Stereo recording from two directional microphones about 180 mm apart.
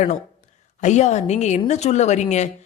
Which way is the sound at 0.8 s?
40° left (ahead or behind).